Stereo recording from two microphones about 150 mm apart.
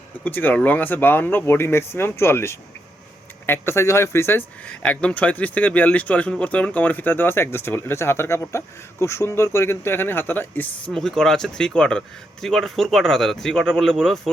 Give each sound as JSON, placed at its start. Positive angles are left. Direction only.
{"t": 0.3, "sound": "speech", "side_deg": 10}